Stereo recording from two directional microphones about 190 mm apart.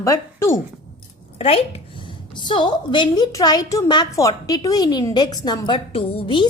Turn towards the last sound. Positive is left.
turn(degrees=25)  # may be behind; listen again after turning